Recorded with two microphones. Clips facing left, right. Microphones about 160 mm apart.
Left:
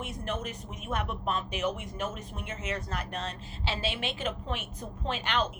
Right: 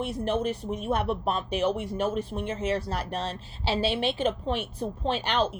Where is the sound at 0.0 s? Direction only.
30° right (ahead or behind).